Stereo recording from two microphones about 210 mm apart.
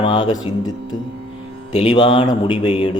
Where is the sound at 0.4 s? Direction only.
20° left (ahead or behind).